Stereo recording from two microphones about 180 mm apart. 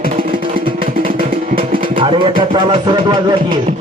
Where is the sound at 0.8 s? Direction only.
50° right (ahead or behind).